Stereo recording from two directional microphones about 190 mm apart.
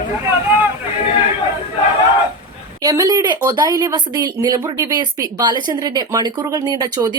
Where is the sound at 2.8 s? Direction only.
15° right (ahead or behind).